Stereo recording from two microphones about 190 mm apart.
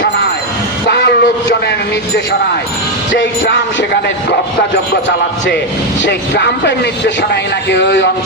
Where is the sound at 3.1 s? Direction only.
70° left (ahead or behind).